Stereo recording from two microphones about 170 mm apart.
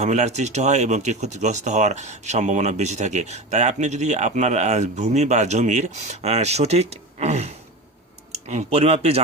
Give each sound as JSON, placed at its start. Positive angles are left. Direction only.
{"t": 0.0, "sound": "speech", "side_deg": -45}